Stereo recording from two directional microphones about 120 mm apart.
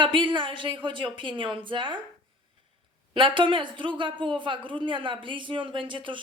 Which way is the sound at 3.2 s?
45° right (ahead or behind).